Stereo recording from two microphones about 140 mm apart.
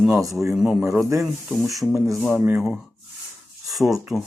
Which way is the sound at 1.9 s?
20° right (ahead or behind).